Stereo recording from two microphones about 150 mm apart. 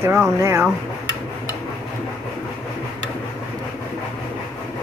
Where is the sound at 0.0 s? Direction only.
15° right (ahead or behind).